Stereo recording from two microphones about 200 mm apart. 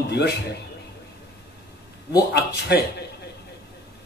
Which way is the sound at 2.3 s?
55° left (ahead or behind).